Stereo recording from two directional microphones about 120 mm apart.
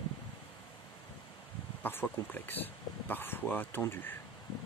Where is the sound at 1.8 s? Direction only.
15° left (ahead or behind).